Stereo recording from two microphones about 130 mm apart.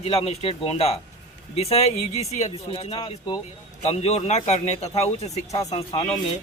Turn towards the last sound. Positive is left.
turn(degrees=50)  # may be behind; listen again after turning